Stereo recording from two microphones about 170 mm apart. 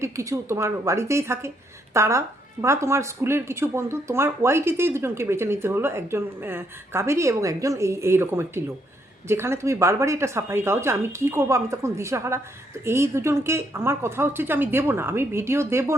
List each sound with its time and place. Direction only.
0.0 s speech: 15° right (ahead or behind)